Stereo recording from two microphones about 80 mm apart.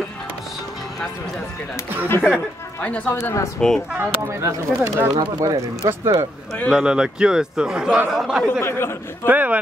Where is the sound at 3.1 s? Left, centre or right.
Left.